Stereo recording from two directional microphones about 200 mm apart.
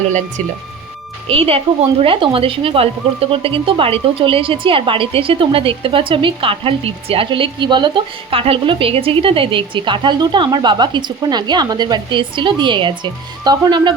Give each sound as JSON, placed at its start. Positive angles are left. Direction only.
{"t": 1.3, "sound": "a woman's voice", "side_deg": -30}